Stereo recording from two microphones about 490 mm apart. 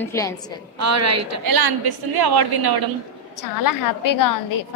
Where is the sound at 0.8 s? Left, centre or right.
Right.